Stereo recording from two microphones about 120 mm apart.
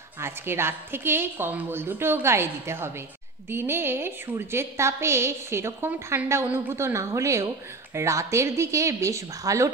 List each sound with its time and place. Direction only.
0.2 s a woman's voice: 20° right (ahead or behind)